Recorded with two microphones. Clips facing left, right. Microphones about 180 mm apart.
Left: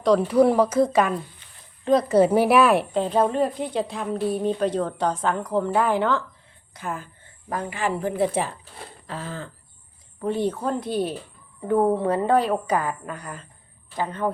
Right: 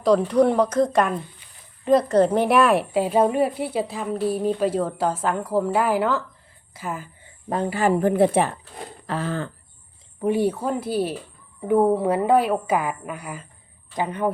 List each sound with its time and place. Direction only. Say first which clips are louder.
0.0 s a woman's voice: even; centre (ahead or behind)
7.5 s speech: right 6 dB; 30° right (ahead or behind); by 8.5 s 60° right (ahead or behind)
9.0 s a sound: right 7 dB; 70° right (ahead or behind)
10.2 s a woman's voice: right 3 dB; 10° right (ahead or behind)